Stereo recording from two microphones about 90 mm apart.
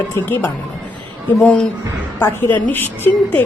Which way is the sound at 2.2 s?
20° left (ahead or behind).